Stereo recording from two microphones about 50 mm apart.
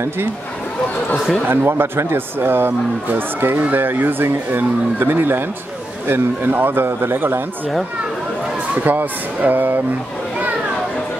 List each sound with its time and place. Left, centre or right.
1.1 s speech: centre
1.5 s speech: right
8.8 s speech: right